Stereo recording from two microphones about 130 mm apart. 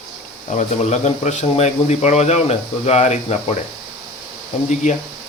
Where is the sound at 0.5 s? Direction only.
60° left (ahead or behind).